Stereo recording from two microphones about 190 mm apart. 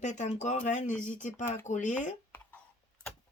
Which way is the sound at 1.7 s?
40° left (ahead or behind).